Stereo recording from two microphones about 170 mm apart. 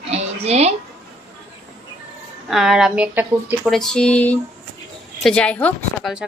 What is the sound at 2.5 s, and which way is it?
Speech, centre (ahead or behind).